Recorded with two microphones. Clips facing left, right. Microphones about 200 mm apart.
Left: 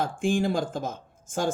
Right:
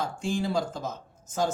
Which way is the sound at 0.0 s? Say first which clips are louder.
Left 4 dB; 50° left (ahead or behind).